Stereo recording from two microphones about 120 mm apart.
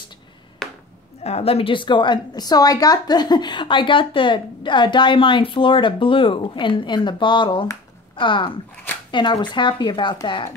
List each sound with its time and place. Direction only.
0.6 s chop: centre (ahead or behind)
1.2 s a woman's voice: 55° left (ahead or behind)